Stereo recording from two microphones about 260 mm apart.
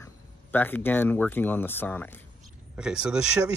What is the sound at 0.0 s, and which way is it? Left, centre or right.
Speech, centre.